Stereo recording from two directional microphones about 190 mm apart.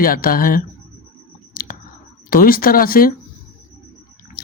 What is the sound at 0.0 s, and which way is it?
Speech, 50° left (ahead or behind).